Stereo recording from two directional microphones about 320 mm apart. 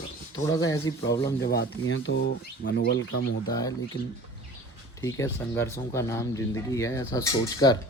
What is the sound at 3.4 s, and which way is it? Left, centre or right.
Speech, centre.